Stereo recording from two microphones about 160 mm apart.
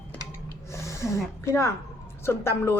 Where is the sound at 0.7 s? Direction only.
20° left (ahead or behind).